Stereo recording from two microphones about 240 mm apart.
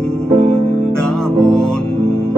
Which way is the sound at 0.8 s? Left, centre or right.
Centre.